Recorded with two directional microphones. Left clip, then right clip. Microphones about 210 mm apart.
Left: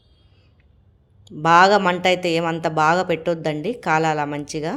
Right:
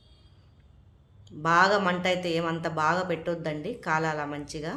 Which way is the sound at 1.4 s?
35° left (ahead or behind).